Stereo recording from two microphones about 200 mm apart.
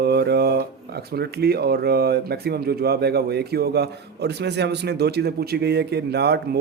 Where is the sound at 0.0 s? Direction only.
55° right (ahead or behind).